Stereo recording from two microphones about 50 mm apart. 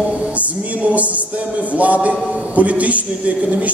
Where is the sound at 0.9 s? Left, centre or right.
Right.